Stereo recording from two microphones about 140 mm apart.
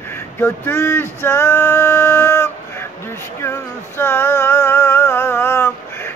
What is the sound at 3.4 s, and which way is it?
Music, 20° left (ahead or behind).